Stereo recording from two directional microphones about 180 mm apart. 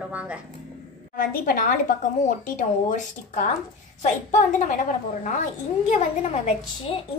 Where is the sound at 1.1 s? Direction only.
50° left (ahead or behind).